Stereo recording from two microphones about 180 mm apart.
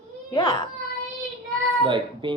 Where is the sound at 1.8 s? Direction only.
25° right (ahead or behind).